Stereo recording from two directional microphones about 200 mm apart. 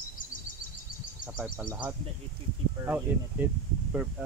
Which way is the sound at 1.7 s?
5° right (ahead or behind).